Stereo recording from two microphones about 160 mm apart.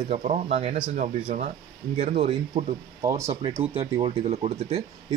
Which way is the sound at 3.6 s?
35° right (ahead or behind).